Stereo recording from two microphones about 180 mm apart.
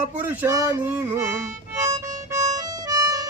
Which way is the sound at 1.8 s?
40° right (ahead or behind).